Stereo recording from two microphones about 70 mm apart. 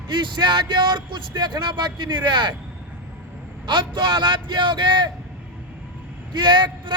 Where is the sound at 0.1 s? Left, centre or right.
Right.